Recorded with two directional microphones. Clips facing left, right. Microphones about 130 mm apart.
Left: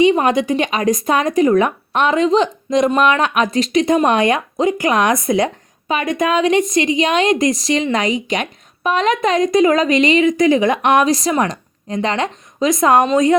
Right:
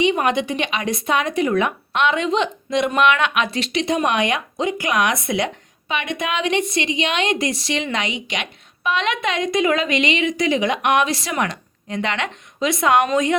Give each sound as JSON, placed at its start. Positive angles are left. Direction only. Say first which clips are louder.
{"t": 0.0, "sound": "speech", "louder": "left 5 dB", "side_deg": 40}